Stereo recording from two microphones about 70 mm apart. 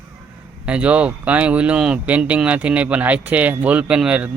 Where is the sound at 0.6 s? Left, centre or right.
Centre.